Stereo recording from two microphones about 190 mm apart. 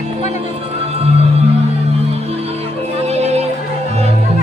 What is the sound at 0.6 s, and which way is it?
Music, 30° right (ahead or behind).